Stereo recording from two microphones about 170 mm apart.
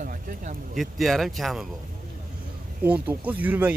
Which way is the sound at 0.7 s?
Centre (ahead or behind).